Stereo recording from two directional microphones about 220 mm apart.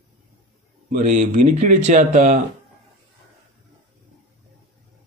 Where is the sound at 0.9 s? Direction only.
35° right (ahead or behind).